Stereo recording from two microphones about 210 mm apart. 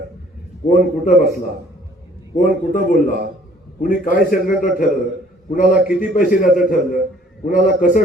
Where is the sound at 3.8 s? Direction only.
40° left (ahead or behind).